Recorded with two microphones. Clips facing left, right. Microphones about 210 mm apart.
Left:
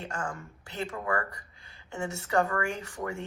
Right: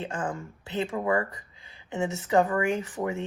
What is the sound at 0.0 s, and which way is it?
Speech, 20° right (ahead or behind).